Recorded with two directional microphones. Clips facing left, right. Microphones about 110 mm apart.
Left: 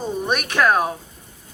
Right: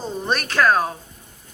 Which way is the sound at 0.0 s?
15° left (ahead or behind).